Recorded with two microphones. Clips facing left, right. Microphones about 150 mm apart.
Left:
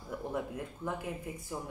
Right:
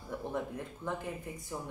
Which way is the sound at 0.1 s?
5° left (ahead or behind).